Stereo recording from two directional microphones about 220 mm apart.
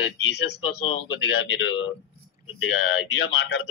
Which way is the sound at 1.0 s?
60° left (ahead or behind).